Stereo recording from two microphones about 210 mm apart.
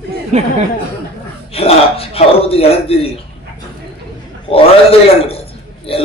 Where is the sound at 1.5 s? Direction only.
25° left (ahead or behind).